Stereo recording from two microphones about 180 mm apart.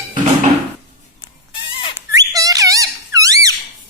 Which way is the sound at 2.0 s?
20° right (ahead or behind).